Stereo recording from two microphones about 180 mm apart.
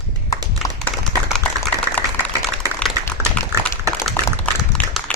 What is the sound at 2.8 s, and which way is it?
Typing, 10° left (ahead or behind).